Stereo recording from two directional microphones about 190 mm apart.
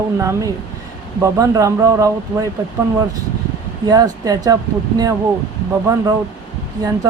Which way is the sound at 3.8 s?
20° right (ahead or behind).